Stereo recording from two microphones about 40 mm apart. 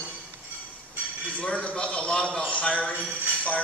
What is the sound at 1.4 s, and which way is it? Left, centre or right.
A man's voice, left.